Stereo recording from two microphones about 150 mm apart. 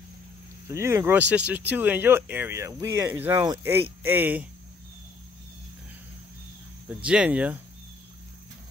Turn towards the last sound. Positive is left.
turn(degrees=-10)  # may be behind; listen again after turning